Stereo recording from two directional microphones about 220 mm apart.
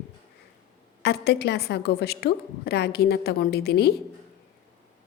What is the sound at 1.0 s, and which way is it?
A woman's voice, 45° left (ahead or behind).